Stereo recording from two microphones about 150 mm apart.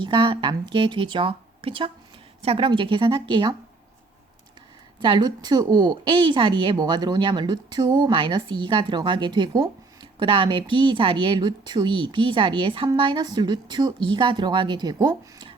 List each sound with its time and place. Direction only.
0.0 s speech: 35° right (ahead or behind)
4.9 s a woman's voice: 35° right (ahead or behind)